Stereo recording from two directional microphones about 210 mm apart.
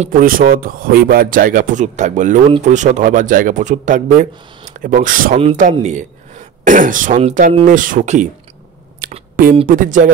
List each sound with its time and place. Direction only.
0.0 s speech: 40° right (ahead or behind)
9.0 s a sound: 40° right (ahead or behind)
9.7 s speech: 40° right (ahead or behind)